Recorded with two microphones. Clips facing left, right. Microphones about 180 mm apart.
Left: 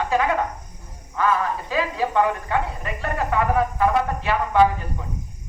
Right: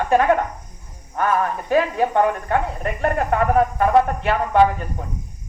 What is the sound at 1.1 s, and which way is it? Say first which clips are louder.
Speech: right 1 dB; 55° right (ahead or behind).